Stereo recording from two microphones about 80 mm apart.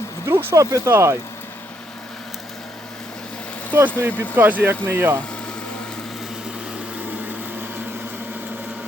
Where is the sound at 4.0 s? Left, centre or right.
Right.